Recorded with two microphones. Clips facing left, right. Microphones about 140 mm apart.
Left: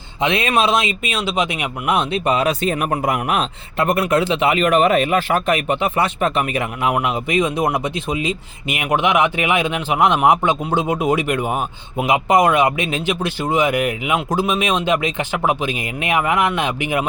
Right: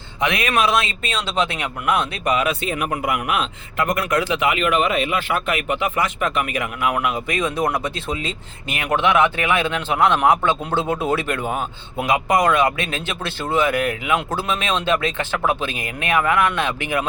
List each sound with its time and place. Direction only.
0.2 s speech: 25° left (ahead or behind)